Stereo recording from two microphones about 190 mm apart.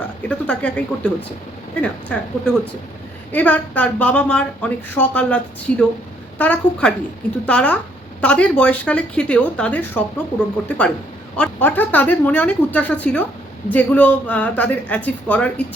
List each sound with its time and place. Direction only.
0.2 s a woman's voice: 5° left (ahead or behind)